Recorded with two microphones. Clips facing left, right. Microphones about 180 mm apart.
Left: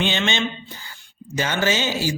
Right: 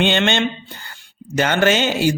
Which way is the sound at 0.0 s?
60° right (ahead or behind).